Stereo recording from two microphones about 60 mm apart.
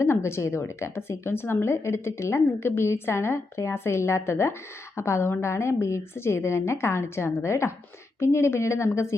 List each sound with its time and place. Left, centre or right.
0.0 s a woman's voice: left